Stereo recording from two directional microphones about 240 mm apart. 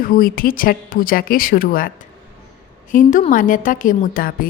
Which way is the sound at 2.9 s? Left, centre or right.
Left.